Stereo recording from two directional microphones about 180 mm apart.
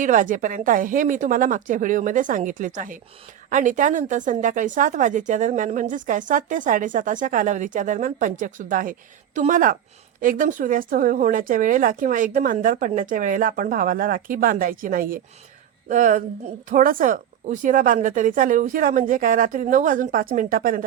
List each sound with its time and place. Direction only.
0.0 s a woman's voice: 45° right (ahead or behind)